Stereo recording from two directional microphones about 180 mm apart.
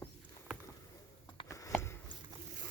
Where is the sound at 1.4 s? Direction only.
20° left (ahead or behind).